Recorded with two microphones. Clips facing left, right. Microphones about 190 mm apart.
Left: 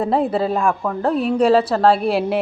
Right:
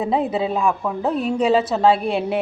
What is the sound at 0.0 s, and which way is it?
A woman's voice, centre (ahead or behind).